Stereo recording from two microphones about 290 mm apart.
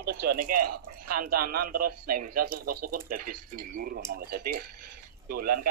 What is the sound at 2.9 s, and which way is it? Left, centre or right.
Speech, right.